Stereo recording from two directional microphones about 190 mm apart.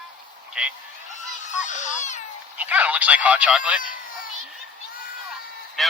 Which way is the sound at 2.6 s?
10° right (ahead or behind).